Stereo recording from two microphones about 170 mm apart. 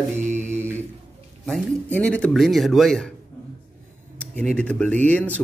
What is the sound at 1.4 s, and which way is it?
Speech, 5° left (ahead or behind).